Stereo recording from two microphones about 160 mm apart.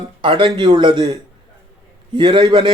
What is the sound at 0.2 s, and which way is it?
Speech, 30° right (ahead or behind).